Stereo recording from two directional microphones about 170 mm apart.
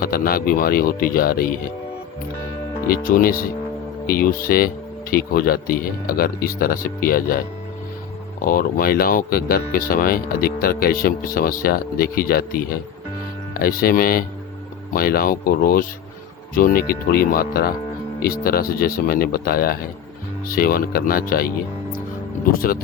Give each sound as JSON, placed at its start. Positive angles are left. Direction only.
{"t": 0.0, "sound": "speech", "side_deg": 60}
{"t": 2.9, "sound": "speech", "side_deg": 55}
{"t": 8.4, "sound": "speech", "side_deg": 55}
{"t": 22.5, "sound": "speech", "side_deg": 55}